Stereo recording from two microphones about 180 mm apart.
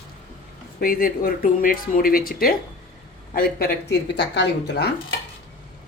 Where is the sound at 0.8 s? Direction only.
55° left (ahead or behind).